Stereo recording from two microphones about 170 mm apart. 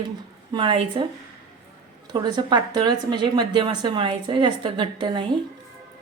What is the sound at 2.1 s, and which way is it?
A woman's voice, 25° right (ahead or behind).